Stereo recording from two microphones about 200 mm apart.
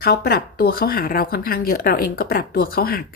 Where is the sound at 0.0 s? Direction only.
50° left (ahead or behind).